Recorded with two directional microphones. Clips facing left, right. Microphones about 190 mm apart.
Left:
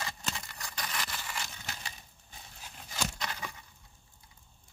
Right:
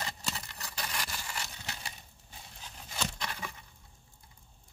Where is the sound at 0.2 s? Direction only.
5° right (ahead or behind).